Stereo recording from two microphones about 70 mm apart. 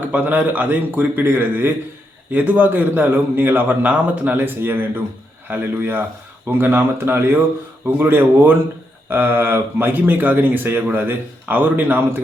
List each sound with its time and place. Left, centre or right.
0.1 s a man's voice: right